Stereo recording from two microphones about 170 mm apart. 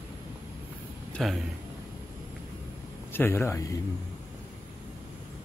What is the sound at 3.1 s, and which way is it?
Speech, 15° left (ahead or behind).